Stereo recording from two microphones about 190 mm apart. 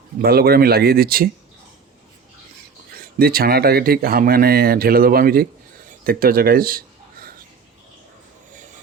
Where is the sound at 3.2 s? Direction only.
50° right (ahead or behind).